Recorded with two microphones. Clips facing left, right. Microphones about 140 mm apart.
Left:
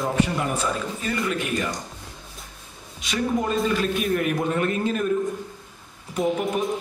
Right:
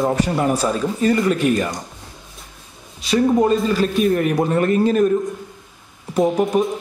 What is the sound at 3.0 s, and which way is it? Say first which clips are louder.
A man's voice: right 9 dB; 35° right (ahead or behind).